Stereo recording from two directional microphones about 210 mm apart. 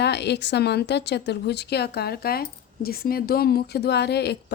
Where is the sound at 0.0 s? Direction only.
55° left (ahead or behind).